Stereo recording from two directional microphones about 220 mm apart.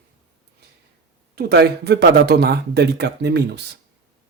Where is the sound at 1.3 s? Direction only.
50° right (ahead or behind).